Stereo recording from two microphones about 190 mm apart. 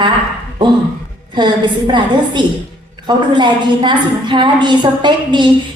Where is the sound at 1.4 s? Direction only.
25° right (ahead or behind).